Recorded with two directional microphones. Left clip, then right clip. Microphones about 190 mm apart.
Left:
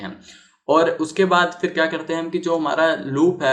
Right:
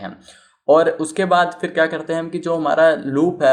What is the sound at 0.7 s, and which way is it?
Speech, 40° right (ahead or behind).